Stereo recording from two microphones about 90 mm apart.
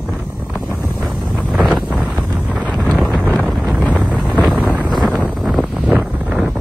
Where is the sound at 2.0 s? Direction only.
15° right (ahead or behind).